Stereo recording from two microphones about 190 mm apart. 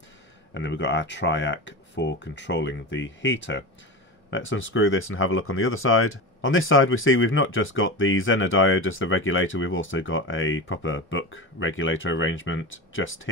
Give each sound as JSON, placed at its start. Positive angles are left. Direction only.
{"t": 0.6, "sound": "speech", "side_deg": 70}
{"t": 4.3, "sound": "speech", "side_deg": 90}